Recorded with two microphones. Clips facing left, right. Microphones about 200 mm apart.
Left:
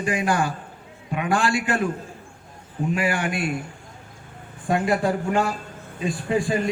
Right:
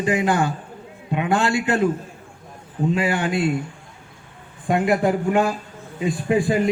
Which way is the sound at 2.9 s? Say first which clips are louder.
Right 2 dB; 25° right (ahead or behind).